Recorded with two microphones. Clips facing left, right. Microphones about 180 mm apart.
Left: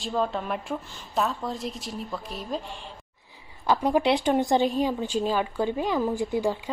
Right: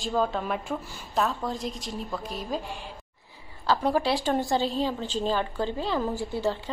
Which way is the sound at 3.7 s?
15° left (ahead or behind).